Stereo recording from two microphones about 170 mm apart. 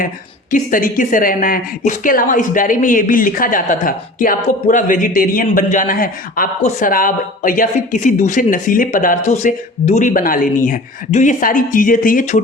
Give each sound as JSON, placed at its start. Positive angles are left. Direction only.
{"t": 0.5, "sound": "a woman's voice", "side_deg": 50}